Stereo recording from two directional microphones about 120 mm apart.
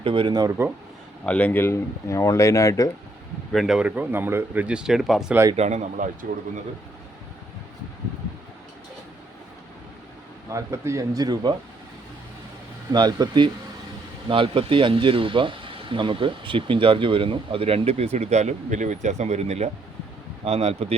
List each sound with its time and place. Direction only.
0.0 s speech: 45° right (ahead or behind)
1.2 s speech: 10° left (ahead or behind); by 2.9 s 30° left (ahead or behind)
3.5 s speech: centre (ahead or behind)
5.5 s speech: 70° right (ahead or behind)
10.5 s speech: 25° right (ahead or behind)
12.9 s speech: 35° right (ahead or behind); by 20.7 s 60° right (ahead or behind)